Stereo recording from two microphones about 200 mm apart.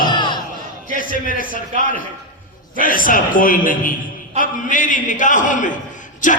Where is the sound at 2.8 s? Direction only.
45° left (ahead or behind).